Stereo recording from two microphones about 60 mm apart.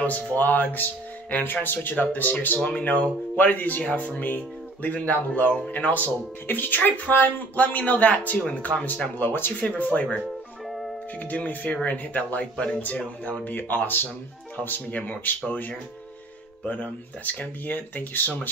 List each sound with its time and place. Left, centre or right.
0.0 s speech: left
11.1 s speech: left